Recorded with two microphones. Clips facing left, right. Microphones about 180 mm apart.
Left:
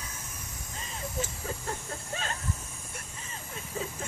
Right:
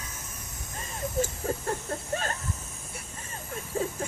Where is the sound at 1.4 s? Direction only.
45° right (ahead or behind).